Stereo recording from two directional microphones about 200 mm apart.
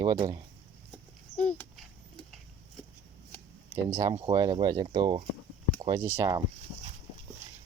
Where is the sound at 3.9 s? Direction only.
20° right (ahead or behind).